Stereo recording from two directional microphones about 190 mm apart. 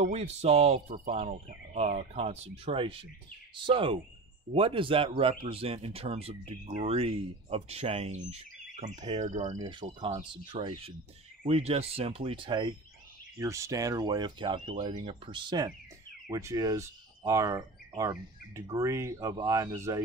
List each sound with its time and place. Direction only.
0.0 s speech: 35° right (ahead or behind)
9.6 s speech: 25° right (ahead or behind)